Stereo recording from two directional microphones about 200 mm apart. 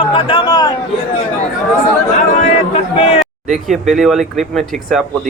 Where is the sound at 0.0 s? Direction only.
25° left (ahead or behind).